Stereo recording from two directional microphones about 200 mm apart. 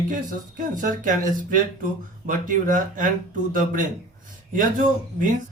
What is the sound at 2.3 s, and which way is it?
Speech, 45° right (ahead or behind).